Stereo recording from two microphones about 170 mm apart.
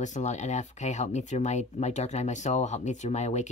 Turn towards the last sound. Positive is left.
turn(degrees=40)  # may be behind; listen again after turning